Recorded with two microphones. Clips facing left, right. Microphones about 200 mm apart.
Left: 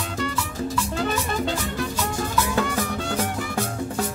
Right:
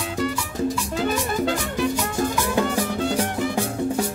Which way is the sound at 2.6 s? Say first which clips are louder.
Right 3 dB; 15° right (ahead or behind).